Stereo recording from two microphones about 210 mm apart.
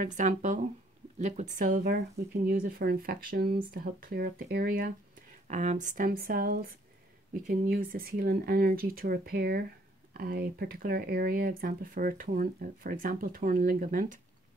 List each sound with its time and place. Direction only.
0.0 s speech: 40° right (ahead or behind)